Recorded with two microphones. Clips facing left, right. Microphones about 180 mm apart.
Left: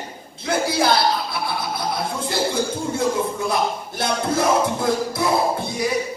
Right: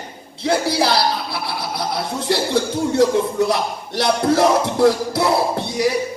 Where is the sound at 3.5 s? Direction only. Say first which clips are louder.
Right 1 dB; 70° right (ahead or behind).